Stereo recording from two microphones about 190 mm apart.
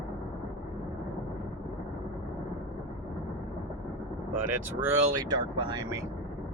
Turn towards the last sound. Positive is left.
turn(degrees=-20)  # may be behind; listen again after turning